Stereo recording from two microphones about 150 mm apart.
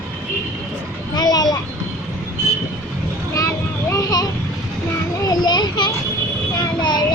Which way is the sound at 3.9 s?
25° left (ahead or behind).